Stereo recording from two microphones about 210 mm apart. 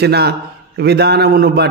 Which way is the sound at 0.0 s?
50° right (ahead or behind).